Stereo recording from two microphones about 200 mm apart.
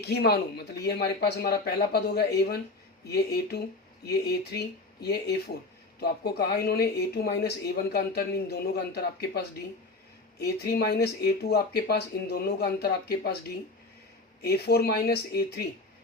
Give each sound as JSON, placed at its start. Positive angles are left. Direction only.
{"t": 0.0, "sound": "speech", "side_deg": 55}
{"t": 6.0, "sound": "speech", "side_deg": 50}